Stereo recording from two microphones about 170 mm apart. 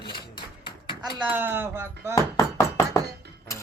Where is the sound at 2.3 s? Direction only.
15° left (ahead or behind).